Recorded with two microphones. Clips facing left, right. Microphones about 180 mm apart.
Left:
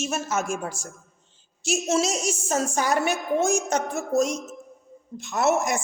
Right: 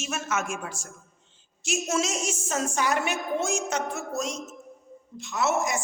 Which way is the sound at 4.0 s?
45° left (ahead or behind).